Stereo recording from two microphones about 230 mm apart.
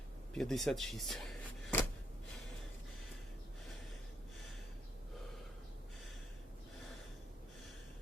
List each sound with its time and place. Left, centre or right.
0.3 s speech: centre